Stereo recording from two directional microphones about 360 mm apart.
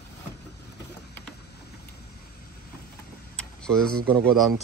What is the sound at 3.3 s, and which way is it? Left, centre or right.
Tick, centre.